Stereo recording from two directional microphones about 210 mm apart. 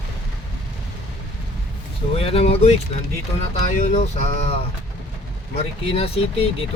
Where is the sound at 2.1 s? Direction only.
30° left (ahead or behind).